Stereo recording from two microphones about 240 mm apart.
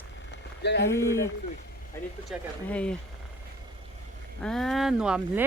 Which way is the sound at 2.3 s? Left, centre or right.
Centre.